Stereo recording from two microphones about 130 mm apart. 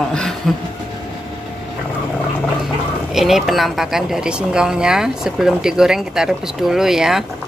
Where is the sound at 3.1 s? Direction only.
Centre (ahead or behind).